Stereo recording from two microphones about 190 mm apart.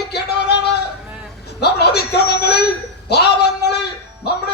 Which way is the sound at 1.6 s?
60° left (ahead or behind).